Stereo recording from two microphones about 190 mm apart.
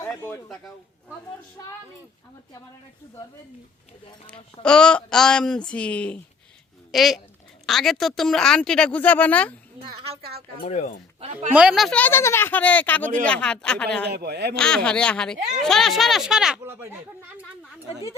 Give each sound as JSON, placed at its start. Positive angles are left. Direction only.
{"t": 0.0, "sound": "a man's voice", "side_deg": 10}
{"t": 4.6, "sound": "speech", "side_deg": 5}
{"t": 10.6, "sound": "speech", "side_deg": 40}
{"t": 11.2, "sound": "a woman's voice", "side_deg": -30}
{"t": 11.5, "sound": "speech", "side_deg": -5}
{"t": 14.1, "sound": "a man's voice", "side_deg": -55}
{"t": 14.5, "sound": "speech", "side_deg": 5}